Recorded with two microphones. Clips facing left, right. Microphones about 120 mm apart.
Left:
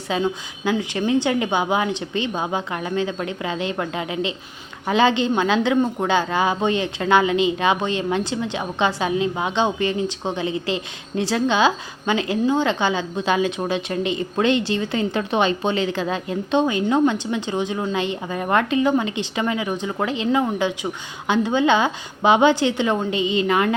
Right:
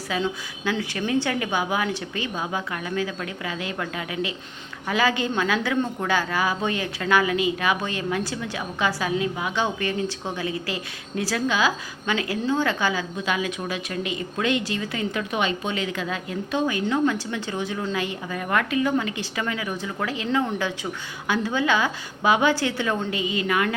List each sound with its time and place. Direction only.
0.2 s a woman's voice: 20° left (ahead or behind)